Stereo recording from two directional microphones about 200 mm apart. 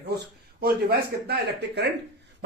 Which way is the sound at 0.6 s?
50° right (ahead or behind).